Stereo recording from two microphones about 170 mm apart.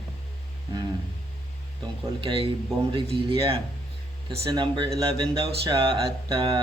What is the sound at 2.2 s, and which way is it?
A man's voice, 30° right (ahead or behind).